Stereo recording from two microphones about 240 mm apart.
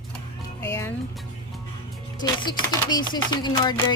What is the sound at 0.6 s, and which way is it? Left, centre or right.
Music, centre.